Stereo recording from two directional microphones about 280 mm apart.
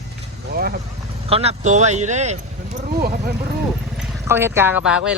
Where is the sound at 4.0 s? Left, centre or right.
Centre.